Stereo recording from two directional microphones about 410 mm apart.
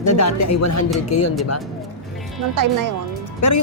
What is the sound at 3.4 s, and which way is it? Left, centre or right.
Speech, left.